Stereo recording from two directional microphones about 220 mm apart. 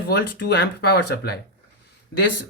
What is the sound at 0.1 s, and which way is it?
Speech, 50° left (ahead or behind).